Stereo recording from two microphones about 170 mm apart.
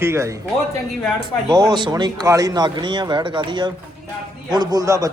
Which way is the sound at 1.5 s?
25° right (ahead or behind).